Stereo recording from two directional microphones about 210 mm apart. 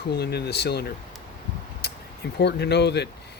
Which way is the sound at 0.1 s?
50° left (ahead or behind).